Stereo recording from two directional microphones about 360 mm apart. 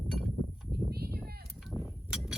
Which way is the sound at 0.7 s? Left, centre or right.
Right.